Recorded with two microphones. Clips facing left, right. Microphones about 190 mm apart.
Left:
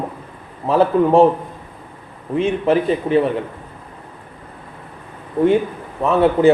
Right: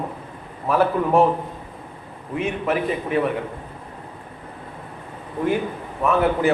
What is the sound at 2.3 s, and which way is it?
Speech, 30° left (ahead or behind).